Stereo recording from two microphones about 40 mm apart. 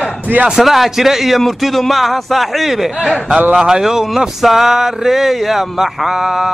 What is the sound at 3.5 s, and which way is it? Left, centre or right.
Speech, centre.